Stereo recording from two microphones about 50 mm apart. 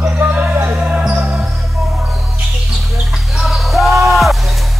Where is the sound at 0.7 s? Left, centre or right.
Centre.